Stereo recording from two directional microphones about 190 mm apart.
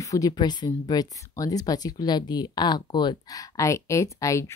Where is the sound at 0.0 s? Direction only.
20° left (ahead or behind).